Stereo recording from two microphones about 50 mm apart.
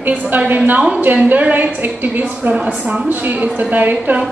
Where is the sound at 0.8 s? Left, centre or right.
Right.